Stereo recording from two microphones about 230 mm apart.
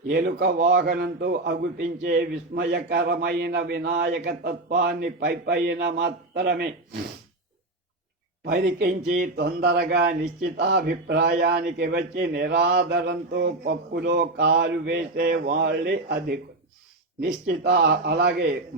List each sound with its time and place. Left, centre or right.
0.1 s a man's voice: right
8.4 s a man's voice: right